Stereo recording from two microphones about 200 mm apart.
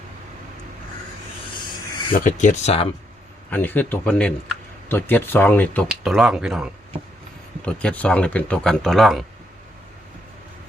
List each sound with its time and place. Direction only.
1.5 s snake: 25° left (ahead or behind)
2.1 s speech: 40° left (ahead or behind)
3.5 s speech: 10° left (ahead or behind)
5.9 s speech: centre (ahead or behind)